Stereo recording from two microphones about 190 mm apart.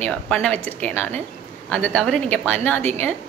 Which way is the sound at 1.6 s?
5° left (ahead or behind).